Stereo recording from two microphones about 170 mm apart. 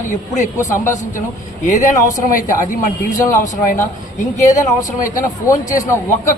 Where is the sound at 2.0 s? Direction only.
50° left (ahead or behind).